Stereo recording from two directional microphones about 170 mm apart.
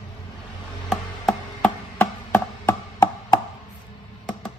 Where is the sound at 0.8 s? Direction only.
Centre (ahead or behind).